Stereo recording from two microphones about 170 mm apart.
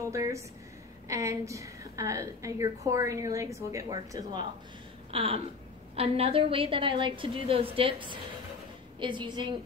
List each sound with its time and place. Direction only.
0.0 s a woman's voice: 20° right (ahead or behind)
5.1 s a woman's voice: 35° right (ahead or behind)